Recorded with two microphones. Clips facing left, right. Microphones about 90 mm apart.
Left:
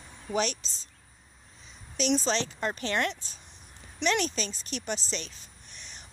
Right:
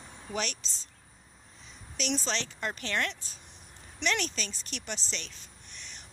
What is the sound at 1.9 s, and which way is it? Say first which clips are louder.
A woman's voice: left 6 dB; 20° left (ahead or behind).